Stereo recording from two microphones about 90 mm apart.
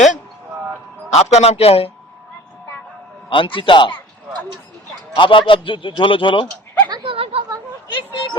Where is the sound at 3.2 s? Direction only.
75° left (ahead or behind).